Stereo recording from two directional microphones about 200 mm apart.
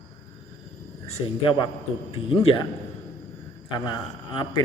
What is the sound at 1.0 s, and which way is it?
A man's voice, 30° left (ahead or behind).